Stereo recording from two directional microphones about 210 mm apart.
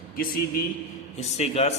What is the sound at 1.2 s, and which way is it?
Speech, 30° left (ahead or behind).